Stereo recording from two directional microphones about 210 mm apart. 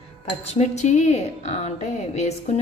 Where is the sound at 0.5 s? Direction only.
30° left (ahead or behind).